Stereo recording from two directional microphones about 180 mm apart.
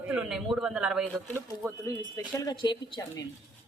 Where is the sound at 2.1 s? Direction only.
20° left (ahead or behind).